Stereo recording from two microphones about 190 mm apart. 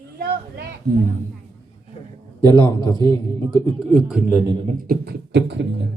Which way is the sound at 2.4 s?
20° left (ahead or behind).